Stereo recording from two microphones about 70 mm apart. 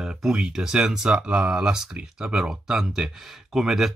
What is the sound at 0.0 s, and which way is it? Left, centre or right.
Speech, centre.